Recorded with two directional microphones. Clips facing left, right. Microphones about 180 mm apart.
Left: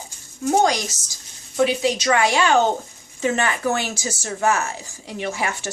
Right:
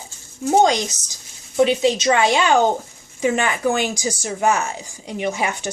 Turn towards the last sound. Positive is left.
turn(degrees=-20)  # may be behind; listen again after turning